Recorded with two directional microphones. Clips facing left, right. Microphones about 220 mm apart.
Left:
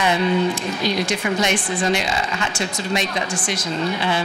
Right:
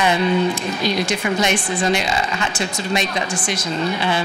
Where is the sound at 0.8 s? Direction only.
15° right (ahead or behind).